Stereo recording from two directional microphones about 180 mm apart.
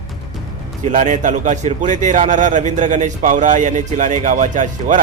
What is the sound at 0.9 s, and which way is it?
A man's voice, 45° right (ahead or behind).